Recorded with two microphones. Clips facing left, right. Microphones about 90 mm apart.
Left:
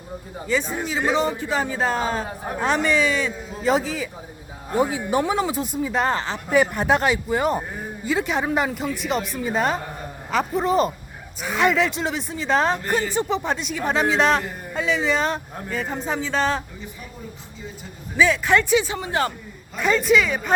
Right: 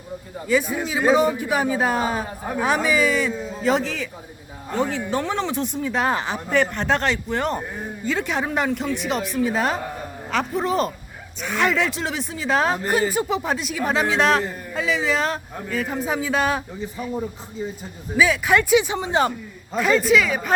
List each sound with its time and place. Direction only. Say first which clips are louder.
0.4 s speech: right 3 dB; 5° right (ahead or behind)
6.1 s speech: right 1 dB; 10° right (ahead or behind)
6.5 s speech: left 2 dB; 10° left (ahead or behind); by 16.6 s 10° right (ahead or behind)
18.2 s speech: even; 5° right (ahead or behind)
18.9 s speech: right 3 dB; 20° right (ahead or behind)
19.7 s speech: right 1 dB; centre (ahead or behind)